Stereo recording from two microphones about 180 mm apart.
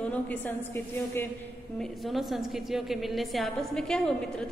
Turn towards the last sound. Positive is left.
turn(degrees=5)  # may be behind; listen again after turning